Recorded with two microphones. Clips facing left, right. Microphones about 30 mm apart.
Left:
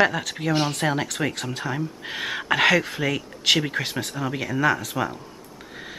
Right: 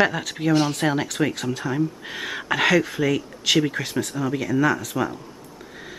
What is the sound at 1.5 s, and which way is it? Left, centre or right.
Speech, centre.